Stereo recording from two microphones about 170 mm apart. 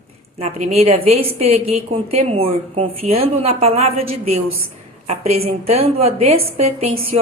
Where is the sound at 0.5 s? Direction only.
40° right (ahead or behind).